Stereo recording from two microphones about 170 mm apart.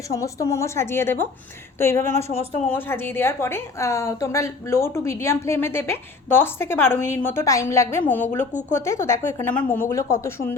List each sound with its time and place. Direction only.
0.1 s a woman's voice: 20° left (ahead or behind)